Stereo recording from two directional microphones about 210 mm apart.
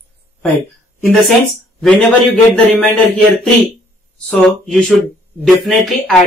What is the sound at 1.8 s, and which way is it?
A man's voice, 5° left (ahead or behind).